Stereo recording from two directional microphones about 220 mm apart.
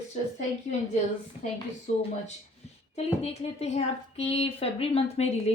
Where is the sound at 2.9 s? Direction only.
30° left (ahead or behind).